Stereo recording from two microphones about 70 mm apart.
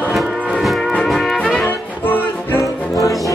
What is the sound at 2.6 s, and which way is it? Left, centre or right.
Brass instrument, left.